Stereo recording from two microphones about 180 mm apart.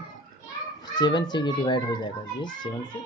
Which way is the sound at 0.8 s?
25° left (ahead or behind).